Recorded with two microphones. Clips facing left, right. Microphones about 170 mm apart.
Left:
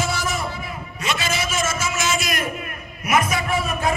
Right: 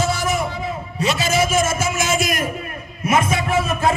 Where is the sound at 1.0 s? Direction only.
40° right (ahead or behind).